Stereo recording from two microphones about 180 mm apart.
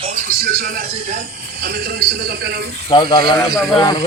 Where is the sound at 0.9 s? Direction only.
40° right (ahead or behind).